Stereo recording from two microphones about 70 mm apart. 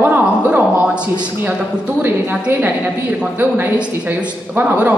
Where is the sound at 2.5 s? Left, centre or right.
Right.